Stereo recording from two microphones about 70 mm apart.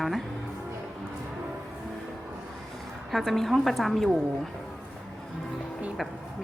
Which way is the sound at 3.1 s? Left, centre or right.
Centre.